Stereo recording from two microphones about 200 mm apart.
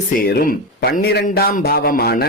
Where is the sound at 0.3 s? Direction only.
50° left (ahead or behind).